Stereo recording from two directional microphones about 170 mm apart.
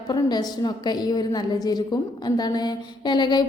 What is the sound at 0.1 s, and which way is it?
A woman's voice, 25° left (ahead or behind).